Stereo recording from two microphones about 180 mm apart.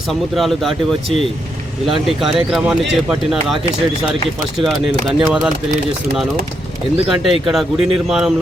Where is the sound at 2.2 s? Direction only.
Centre (ahead or behind).